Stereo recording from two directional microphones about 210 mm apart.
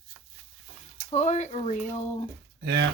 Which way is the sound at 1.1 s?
35° left (ahead or behind).